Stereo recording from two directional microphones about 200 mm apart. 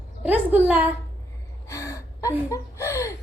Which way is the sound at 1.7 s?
15° left (ahead or behind).